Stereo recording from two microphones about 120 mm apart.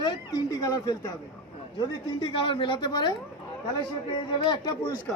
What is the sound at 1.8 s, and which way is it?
Speech, 40° left (ahead or behind).